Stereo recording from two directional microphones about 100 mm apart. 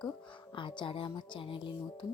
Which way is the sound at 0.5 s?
50° left (ahead or behind).